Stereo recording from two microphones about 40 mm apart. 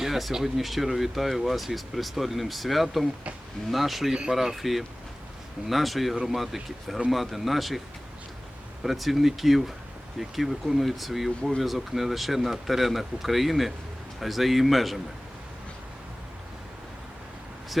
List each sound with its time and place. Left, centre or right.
0.0 s speech: centre
4.1 s speech: centre
4.4 s speech: centre
8.8 s speech: centre